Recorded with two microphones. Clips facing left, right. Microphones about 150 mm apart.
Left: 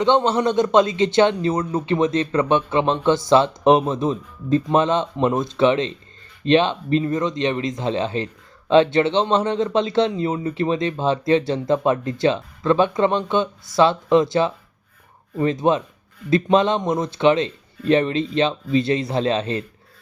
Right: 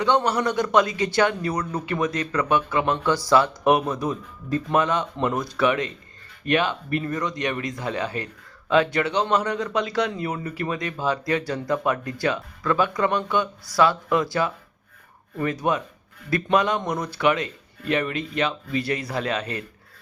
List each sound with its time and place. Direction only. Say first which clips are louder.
0.0 s speech: left 4 dB; 20° left (ahead or behind)